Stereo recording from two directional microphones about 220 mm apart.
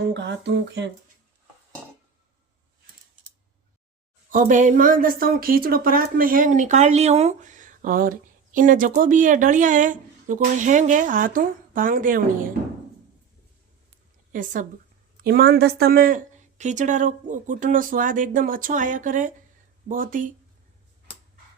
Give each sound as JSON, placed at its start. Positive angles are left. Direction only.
{"t": 0.0, "sound": "speech", "side_deg": -50}
{"t": 4.3, "sound": "speech", "side_deg": -35}
{"t": 14.3, "sound": "speech", "side_deg": -35}